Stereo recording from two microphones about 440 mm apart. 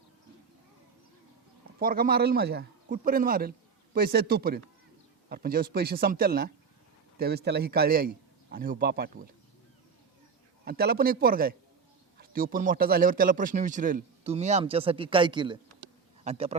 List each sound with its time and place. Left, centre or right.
1.8 s a man's voice: centre
10.7 s a man's voice: right